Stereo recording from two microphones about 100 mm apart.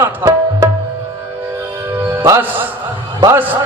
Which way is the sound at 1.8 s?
20° right (ahead or behind).